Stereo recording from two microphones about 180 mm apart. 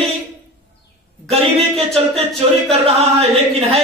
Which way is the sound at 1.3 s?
35° right (ahead or behind).